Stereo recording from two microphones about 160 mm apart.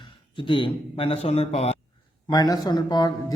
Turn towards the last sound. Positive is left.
turn(degrees=25)  # may be behind; listen again after turning